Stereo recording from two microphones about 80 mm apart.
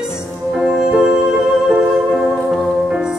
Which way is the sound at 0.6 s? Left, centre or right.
Centre.